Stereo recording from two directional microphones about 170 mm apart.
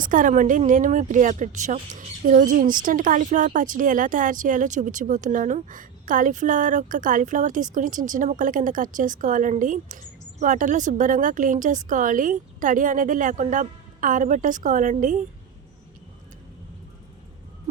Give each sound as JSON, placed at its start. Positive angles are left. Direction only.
{"t": 0.0, "sound": "speech", "side_deg": -50}